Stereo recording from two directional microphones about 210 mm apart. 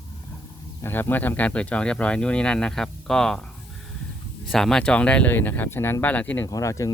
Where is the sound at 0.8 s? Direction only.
10° left (ahead or behind).